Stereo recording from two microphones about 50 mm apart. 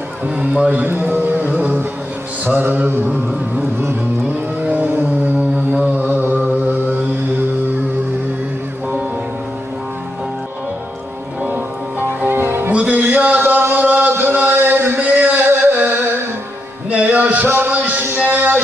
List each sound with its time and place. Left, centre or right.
0.4 s a man's voice: right
0.8 s music: right
2.6 s mantra: right
4.6 s vehicle: right
5.2 s music: right
11.4 s music: right
12.4 s music: right
12.7 s a sound: right
15.0 s music: right